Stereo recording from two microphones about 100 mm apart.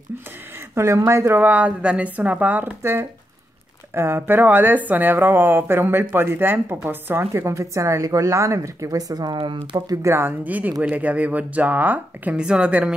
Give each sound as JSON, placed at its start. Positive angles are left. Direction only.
{"t": 0.7, "sound": "a woman's voice", "side_deg": -30}
{"t": 10.0, "sound": "a woman's voice", "side_deg": -20}